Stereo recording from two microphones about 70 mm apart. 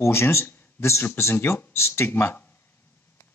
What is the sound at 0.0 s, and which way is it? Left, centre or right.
Speech, left.